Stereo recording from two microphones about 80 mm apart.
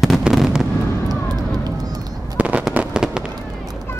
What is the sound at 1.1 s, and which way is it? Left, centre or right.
Fireworks, right.